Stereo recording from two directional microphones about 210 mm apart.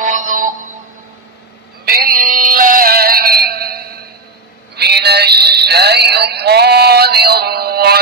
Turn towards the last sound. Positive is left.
turn(degrees=-50)  # may be behind; listen again after turning